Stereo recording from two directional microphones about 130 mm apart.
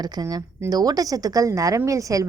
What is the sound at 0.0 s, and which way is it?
A woman's voice, 30° right (ahead or behind).